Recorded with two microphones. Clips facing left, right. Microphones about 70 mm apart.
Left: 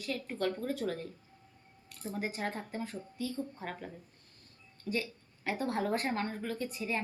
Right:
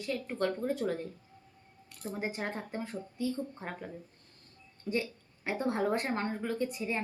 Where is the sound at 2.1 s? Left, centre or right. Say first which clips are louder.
Even; right.